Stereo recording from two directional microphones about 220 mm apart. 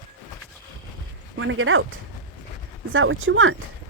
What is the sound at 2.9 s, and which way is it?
Speech, 60° right (ahead or behind).